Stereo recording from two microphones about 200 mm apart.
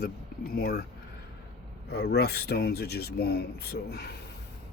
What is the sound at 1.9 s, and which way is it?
Speech, 55° left (ahead or behind).